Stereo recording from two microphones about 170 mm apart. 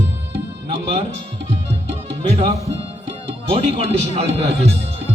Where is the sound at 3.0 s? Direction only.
30° right (ahead or behind).